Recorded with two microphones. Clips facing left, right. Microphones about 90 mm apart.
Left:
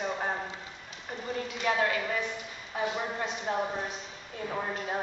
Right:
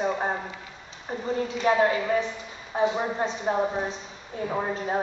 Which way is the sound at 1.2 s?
30° right (ahead or behind).